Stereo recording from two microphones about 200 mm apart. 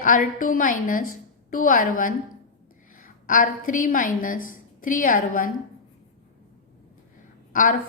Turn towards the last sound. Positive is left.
turn(degrees=40)  # may be behind; listen again after turning